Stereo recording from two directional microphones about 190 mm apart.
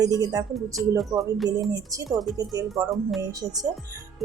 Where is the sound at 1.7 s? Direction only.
20° right (ahead or behind).